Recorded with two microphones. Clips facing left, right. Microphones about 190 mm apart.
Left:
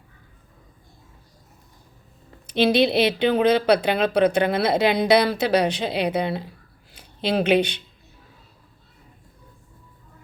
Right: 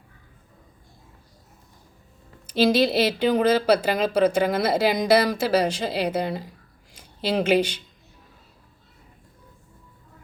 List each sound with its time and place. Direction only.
2.7 s speech: 65° left (ahead or behind)
4.9 s a woman's voice: 5° right (ahead or behind)
5.4 s speech: 65° left (ahead or behind)